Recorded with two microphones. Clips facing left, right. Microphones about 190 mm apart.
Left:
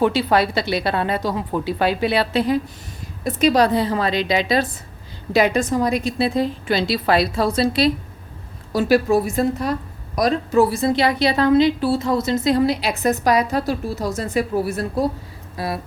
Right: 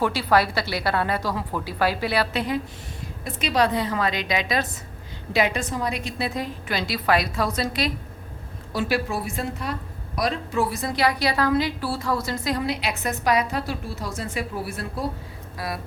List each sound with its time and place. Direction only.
0.0 s a woman's voice: 20° left (ahead or behind)
8.7 s a woman's voice: 40° left (ahead or behind)
15.5 s speech: 25° left (ahead or behind)